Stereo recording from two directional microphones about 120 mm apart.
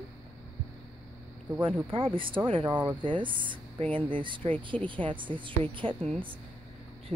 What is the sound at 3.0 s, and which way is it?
Speech, 45° right (ahead or behind).